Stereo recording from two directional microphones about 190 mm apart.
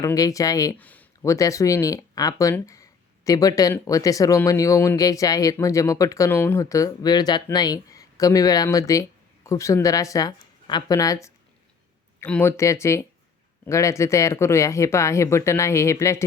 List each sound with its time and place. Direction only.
0.0 s speech: 15° left (ahead or behind)